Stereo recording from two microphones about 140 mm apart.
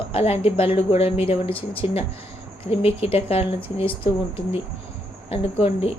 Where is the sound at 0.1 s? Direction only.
45° left (ahead or behind).